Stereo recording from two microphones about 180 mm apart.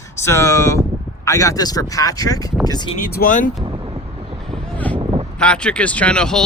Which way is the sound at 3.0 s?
55° left (ahead or behind).